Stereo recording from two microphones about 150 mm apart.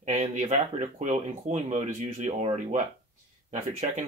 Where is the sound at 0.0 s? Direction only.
50° right (ahead or behind).